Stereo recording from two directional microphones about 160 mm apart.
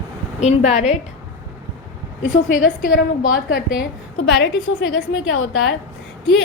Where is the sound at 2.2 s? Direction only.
60° left (ahead or behind).